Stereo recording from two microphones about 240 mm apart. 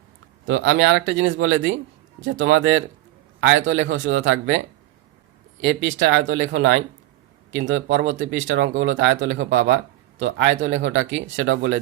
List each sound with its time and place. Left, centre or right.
0.4 s speech: right